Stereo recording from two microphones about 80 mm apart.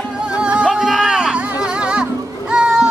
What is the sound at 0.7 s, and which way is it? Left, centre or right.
Music, centre.